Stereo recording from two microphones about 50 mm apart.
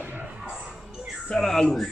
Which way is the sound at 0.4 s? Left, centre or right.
Centre.